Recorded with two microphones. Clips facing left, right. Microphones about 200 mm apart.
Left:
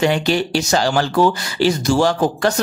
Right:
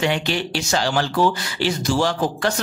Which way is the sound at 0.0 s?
40° left (ahead or behind).